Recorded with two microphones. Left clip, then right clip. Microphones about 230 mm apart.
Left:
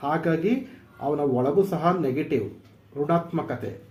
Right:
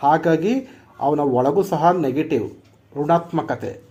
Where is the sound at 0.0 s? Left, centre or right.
Right.